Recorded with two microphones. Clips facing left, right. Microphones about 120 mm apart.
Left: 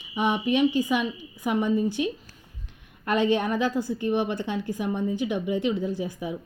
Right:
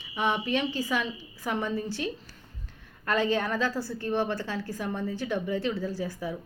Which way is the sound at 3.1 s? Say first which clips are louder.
Left 3 dB; 20° left (ahead or behind).